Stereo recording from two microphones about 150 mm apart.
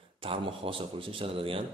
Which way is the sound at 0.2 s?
35° right (ahead or behind).